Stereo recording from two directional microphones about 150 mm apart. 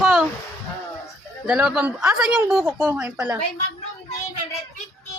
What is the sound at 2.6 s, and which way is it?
Speech, 15° right (ahead or behind).